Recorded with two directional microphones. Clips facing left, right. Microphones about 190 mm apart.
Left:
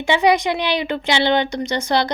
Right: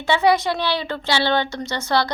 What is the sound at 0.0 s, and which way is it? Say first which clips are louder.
A woman's voice: left 1 dB; 15° left (ahead or behind).